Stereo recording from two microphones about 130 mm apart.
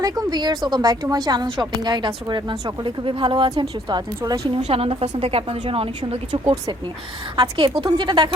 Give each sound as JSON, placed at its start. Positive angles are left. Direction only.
{"t": 0.0, "sound": "speech", "side_deg": -30}
{"t": 4.5, "sound": "a woman's voice", "side_deg": -50}
{"t": 7.3, "sound": "speech", "side_deg": -30}